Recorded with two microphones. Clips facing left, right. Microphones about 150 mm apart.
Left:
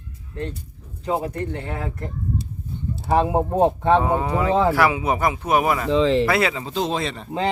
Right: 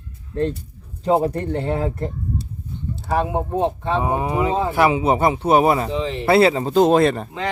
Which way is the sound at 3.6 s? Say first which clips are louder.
Left 5 dB; 55° left (ahead or behind).